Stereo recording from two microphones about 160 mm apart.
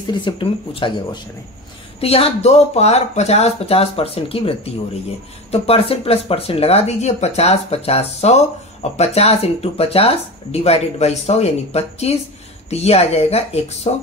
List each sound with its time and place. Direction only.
0.1 s speech: 30° left (ahead or behind)